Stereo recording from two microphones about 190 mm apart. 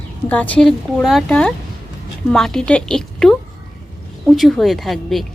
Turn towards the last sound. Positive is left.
turn(degrees=0)  # may be behind; listen again after turning